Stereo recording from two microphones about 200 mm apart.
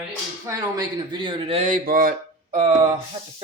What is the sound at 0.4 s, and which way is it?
A man's voice, 15° right (ahead or behind).